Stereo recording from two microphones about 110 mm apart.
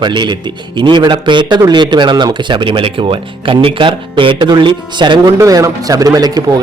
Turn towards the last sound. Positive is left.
turn(degrees=-35)  # may be behind; listen again after turning